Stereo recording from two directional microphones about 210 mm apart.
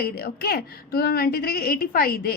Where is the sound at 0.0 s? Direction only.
45° left (ahead or behind).